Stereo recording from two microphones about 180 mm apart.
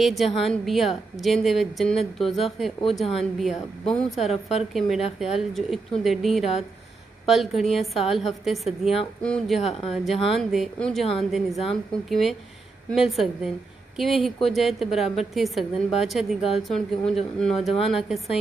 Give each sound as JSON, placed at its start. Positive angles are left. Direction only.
{"t": 0.0, "sound": "a woman's voice", "side_deg": 0}
{"t": 4.2, "sound": "speech", "side_deg": 35}
{"t": 4.7, "sound": "a woman's voice", "side_deg": 0}
{"t": 9.7, "sound": "speech", "side_deg": 35}
{"t": 10.2, "sound": "a woman's voice", "side_deg": 0}